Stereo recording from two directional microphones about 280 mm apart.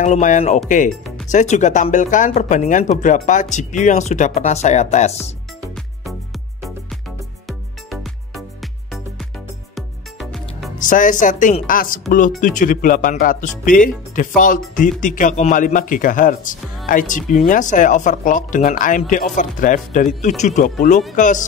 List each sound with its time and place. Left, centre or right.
0.0 s speech: left
5.6 s music: centre
7.4 s music: centre
10.8 s speech: left